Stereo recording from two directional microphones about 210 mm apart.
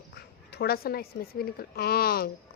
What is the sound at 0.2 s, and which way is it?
Speech, 50° left (ahead or behind).